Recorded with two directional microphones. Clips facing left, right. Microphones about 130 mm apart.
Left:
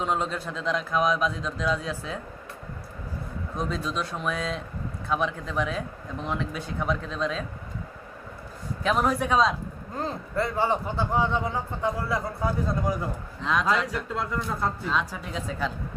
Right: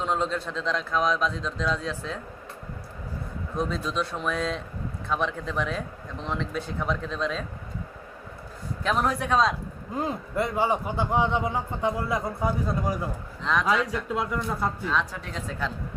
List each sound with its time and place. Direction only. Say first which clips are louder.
0.0 s a man's voice: right 1 dB; 5° left (ahead or behind)
3.5 s speech: right 2 dB; centre (ahead or behind)
8.8 s speech: left 1 dB; centre (ahead or behind)
9.9 s a man's voice: right 1 dB; 15° right (ahead or behind)
13.4 s speech: even; 5° left (ahead or behind)
14.0 s a man's voice: right 2 dB; 10° right (ahead or behind)
14.9 s speech: even; 5° left (ahead or behind)